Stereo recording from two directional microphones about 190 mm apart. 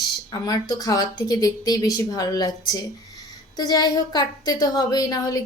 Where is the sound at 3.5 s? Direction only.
20° left (ahead or behind).